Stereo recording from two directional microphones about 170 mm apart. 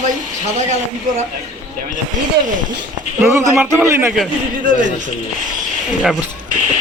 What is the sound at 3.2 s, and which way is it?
Speech, 10° right (ahead or behind).